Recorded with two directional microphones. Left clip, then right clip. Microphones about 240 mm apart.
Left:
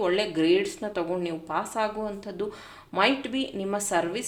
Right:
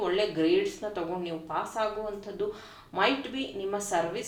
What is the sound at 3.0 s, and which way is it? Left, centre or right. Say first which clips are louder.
A woman's voice: left 3 dB; left.